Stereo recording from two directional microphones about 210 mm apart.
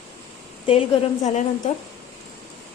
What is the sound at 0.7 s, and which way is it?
Speech, 30° left (ahead or behind).